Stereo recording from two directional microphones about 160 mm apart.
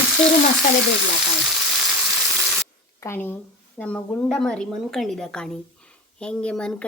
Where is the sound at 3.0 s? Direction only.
15° left (ahead or behind).